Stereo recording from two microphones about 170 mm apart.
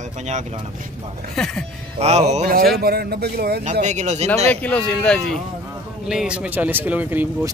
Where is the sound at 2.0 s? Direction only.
40° right (ahead or behind).